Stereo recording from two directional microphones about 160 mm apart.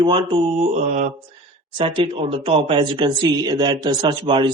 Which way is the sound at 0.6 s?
50° right (ahead or behind).